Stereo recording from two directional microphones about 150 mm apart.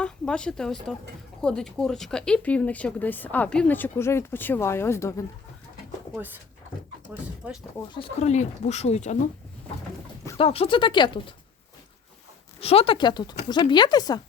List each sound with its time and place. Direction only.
0.0 s speech: 5° left (ahead or behind)
6.1 s speech: 15° right (ahead or behind)
7.4 s speech: 10° right (ahead or behind)
7.9 s speech: 40° left (ahead or behind)
10.3 s speech: 40° left (ahead or behind)
12.5 s speech: 40° left (ahead or behind)